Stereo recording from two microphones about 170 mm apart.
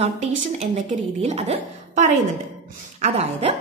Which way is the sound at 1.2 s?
40° right (ahead or behind).